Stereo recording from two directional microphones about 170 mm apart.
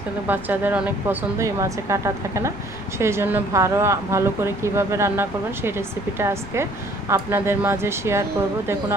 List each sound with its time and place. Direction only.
0.3 s speech: 10° right (ahead or behind)